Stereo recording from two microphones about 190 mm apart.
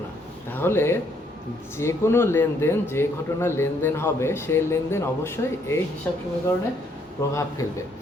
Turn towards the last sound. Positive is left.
turn(degrees=15)  # may be behind; listen again after turning